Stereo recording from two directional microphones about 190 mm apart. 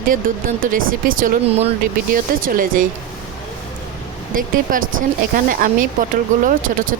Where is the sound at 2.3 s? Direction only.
50° right (ahead or behind).